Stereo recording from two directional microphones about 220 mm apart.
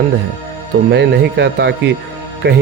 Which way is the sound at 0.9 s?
50° right (ahead or behind).